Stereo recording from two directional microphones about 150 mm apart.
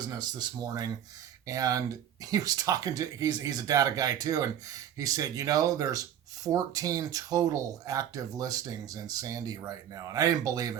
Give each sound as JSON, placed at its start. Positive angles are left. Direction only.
{"t": 0.1, "sound": "speech", "side_deg": -25}